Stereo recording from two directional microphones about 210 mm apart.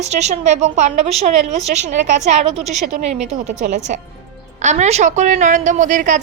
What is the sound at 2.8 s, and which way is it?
A woman's voice, 30° right (ahead or behind).